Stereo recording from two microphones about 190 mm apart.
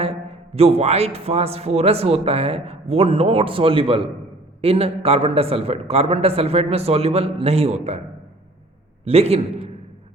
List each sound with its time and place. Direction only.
0.0 s a man's voice: 30° right (ahead or behind)
9.0 s a man's voice: 30° right (ahead or behind)